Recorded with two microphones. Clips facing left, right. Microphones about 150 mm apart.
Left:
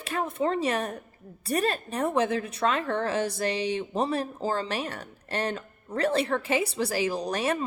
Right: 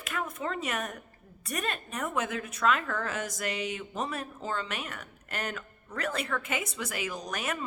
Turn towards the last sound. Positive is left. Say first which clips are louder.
# left 7 dB
turn(degrees=30)  # may be behind; listen again after turning